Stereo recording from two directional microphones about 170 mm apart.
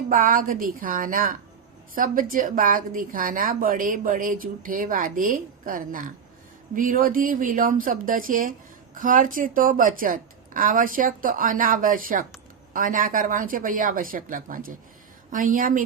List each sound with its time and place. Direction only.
0.1 s a woman's voice: 55° right (ahead or behind)